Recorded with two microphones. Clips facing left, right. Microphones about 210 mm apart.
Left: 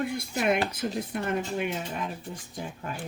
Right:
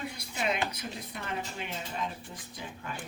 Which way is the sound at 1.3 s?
60° left (ahead or behind).